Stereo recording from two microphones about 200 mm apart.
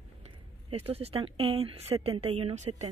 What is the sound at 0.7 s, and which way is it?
A woman's voice, 30° right (ahead or behind).